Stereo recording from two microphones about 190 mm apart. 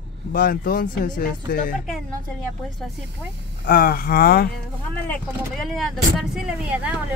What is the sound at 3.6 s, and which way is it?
Speech, 50° left (ahead or behind).